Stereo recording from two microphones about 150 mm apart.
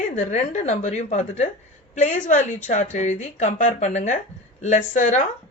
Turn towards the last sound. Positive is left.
turn(degrees=55)  # may be behind; listen again after turning